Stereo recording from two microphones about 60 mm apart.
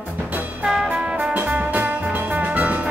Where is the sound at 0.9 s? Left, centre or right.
Centre.